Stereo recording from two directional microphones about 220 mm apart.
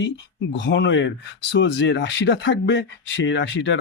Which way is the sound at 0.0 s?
55° left (ahead or behind).